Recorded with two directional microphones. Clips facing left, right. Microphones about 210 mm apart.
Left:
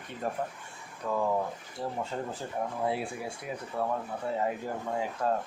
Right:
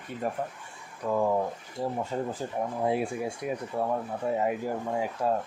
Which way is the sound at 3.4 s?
20° right (ahead or behind).